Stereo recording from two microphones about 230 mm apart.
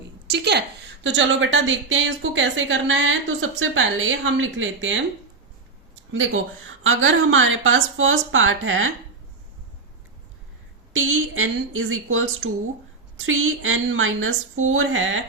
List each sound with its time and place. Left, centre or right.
0.3 s a woman's voice: right
6.1 s a woman's voice: right
10.9 s a woman's voice: right